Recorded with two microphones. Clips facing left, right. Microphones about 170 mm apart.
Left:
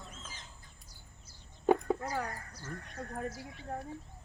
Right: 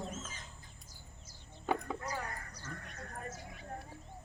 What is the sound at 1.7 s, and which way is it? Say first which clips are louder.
Chicken: left 7 dB; 45° left (ahead or behind).